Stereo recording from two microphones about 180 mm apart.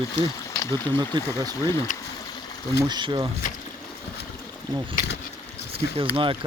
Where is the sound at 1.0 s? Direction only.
25° right (ahead or behind).